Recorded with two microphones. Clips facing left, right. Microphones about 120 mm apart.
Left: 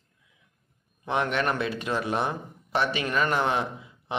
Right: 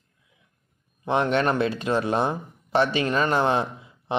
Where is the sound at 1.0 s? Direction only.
30° right (ahead or behind).